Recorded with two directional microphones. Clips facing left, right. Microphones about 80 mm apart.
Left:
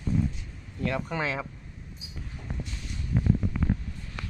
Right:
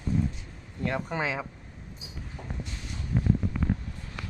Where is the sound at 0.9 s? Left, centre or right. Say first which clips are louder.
Even; right.